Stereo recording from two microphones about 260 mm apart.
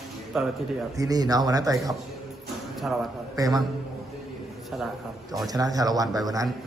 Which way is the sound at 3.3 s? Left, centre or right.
Centre.